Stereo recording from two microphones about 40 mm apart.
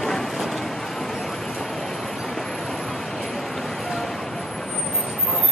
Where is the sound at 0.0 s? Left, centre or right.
Centre.